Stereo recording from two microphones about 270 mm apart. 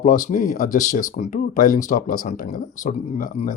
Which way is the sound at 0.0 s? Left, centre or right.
Left.